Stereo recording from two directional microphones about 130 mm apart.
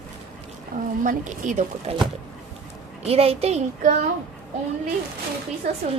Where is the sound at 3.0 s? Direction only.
50° right (ahead or behind).